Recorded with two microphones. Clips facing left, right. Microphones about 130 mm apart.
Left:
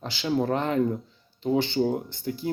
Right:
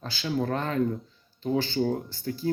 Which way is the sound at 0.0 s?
20° left (ahead or behind).